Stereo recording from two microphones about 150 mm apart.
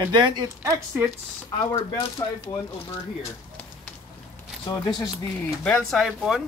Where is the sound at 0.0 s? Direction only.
30° right (ahead or behind).